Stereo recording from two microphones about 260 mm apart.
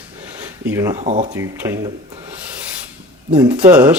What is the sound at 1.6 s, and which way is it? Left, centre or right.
Speech, centre.